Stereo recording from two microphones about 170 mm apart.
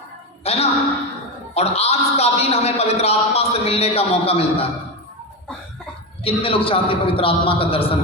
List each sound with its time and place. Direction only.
0.4 s a sound: 35° left (ahead or behind)
1.5 s a man's voice: 35° left (ahead or behind)
6.2 s a man's voice: 35° left (ahead or behind)